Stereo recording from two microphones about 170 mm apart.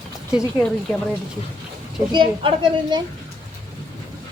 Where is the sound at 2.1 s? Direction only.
30° right (ahead or behind).